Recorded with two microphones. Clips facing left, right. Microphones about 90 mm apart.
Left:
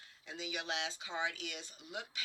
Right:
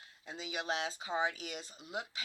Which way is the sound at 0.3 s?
35° right (ahead or behind).